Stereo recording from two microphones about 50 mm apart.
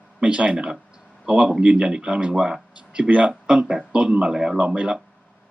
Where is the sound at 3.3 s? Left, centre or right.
Centre.